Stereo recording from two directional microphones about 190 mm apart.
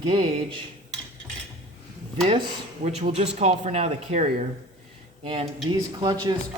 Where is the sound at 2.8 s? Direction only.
35° right (ahead or behind).